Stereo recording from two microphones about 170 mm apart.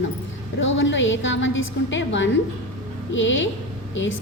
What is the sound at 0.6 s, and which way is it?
A woman's voice, 90° left.